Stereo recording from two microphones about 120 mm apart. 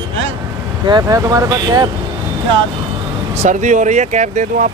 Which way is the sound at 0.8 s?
35° right (ahead or behind).